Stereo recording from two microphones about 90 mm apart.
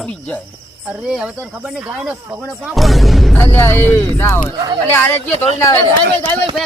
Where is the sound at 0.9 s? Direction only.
10° right (ahead or behind).